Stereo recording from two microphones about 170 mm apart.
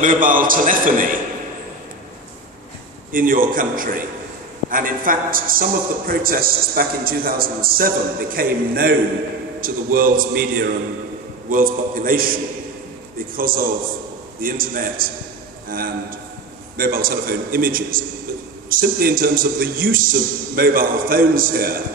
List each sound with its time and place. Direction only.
0.0 s a man's voice: 50° right (ahead or behind)
3.1 s a man's voice: 55° right (ahead or behind)
13.4 s a man's voice: 55° right (ahead or behind)